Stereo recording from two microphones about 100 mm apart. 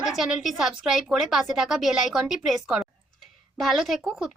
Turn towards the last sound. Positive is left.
turn(degrees=-5)  # may be behind; listen again after turning